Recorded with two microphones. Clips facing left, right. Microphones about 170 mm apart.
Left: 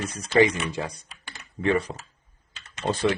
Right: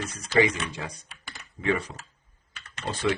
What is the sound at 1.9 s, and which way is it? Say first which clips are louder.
Speech: left 6 dB; 50° left (ahead or behind).